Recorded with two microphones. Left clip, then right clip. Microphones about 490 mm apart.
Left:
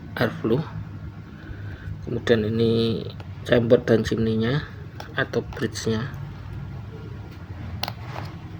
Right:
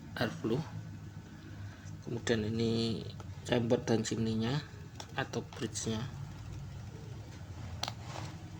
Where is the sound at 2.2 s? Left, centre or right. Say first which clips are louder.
Left 13 dB; right.